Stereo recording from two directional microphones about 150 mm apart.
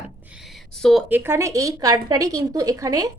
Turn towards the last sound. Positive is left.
turn(degrees=-25)  # may be behind; listen again after turning